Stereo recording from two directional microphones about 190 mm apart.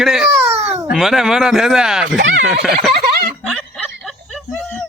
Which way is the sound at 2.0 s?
70° right (ahead or behind).